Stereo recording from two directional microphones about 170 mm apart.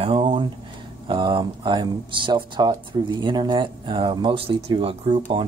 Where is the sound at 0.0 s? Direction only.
30° right (ahead or behind).